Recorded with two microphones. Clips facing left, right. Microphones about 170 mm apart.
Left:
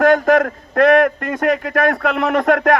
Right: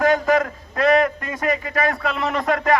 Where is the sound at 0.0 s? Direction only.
55° left (ahead or behind).